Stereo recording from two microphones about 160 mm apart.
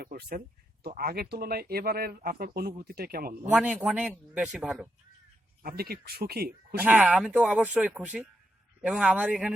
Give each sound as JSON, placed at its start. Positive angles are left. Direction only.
{"t": 0.0, "sound": "speech", "side_deg": -70}
{"t": 3.5, "sound": "a man's voice", "side_deg": -5}
{"t": 5.6, "sound": "speech", "side_deg": -75}
{"t": 6.8, "sound": "speech", "side_deg": -5}